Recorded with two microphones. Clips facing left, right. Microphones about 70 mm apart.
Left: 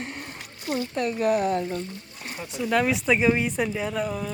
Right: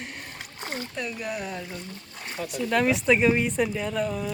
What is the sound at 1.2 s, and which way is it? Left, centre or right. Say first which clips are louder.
Speech: left 10 dB; left.